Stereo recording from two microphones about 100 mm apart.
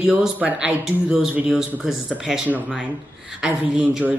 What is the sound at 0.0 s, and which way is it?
Speech, 10° right (ahead or behind).